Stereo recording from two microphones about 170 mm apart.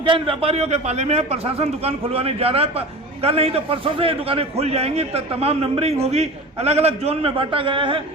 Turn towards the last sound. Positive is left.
turn(degrees=-30)  # may be behind; listen again after turning